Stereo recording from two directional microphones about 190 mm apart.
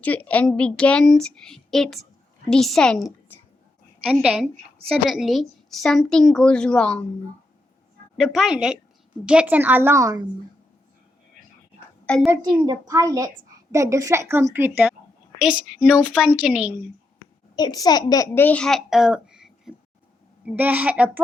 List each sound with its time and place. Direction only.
0.0 s a woman's voice: 10° left (ahead or behind)
3.3 s a sound: 10° left (ahead or behind)
4.0 s a woman's voice: 5° right (ahead or behind)
8.2 s a woman's voice: centre (ahead or behind); by 10.2 s 20° right (ahead or behind)
12.0 s a woman's voice: 5° left (ahead or behind)
12.3 s a woman's voice: 20° right (ahead or behind); by 16.7 s 5° right (ahead or behind)
17.5 s a child's voice: 20° left (ahead or behind); by 21.1 s 5° right (ahead or behind)